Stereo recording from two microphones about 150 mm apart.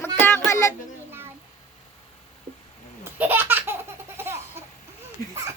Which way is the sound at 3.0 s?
15° right (ahead or behind).